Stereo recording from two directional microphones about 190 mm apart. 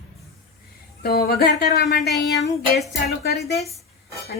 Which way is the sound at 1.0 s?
55° left (ahead or behind).